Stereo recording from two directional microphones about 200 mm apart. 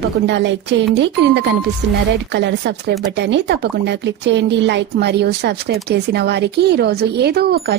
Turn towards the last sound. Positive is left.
turn(degrees=-55)  # may be behind; listen again after turning